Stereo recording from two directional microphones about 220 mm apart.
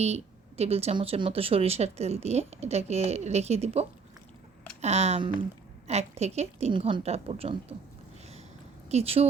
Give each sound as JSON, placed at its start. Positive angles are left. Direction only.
{"t": 0.0, "sound": "speech", "side_deg": -30}
{"t": 8.9, "sound": "speech", "side_deg": -30}